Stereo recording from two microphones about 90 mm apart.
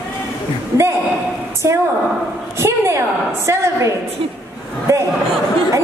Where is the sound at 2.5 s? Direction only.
30° right (ahead or behind).